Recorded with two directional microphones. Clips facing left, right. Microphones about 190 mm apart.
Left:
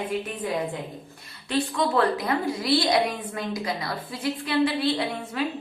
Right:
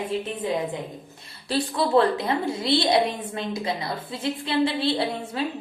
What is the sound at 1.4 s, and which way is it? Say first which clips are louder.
A woman's voice: even; 35° right (ahead or behind).